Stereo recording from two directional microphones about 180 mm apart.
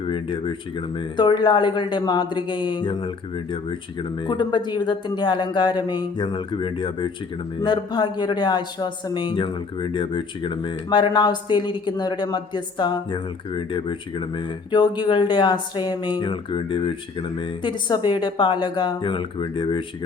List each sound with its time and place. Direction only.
0.0 s a man's voice: 30° left (ahead or behind)
4.3 s a man's voice: 25° left (ahead or behind)